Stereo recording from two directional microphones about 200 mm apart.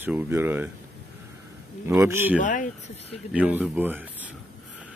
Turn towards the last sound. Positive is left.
turn(degrees=-10)  # may be behind; listen again after turning